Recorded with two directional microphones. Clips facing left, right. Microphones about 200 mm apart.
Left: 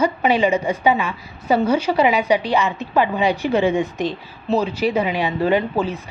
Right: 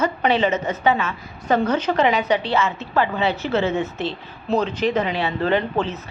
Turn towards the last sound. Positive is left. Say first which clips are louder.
# left 2 dB
turn(degrees=10)  # may be behind; listen again after turning